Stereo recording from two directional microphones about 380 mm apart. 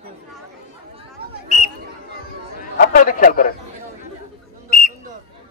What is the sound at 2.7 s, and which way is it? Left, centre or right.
Speech, left.